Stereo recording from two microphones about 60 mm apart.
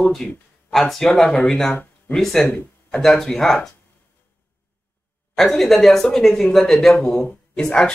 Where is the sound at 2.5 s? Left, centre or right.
Left.